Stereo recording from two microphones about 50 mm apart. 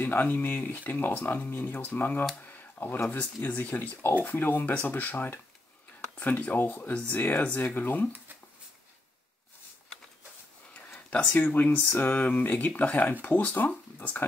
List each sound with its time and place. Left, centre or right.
0.0 s speech: left
2.4 s a sound: left
3.1 s speech: left
11.3 s speech: left